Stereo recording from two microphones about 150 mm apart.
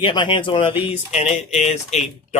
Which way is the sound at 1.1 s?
50° left (ahead or behind).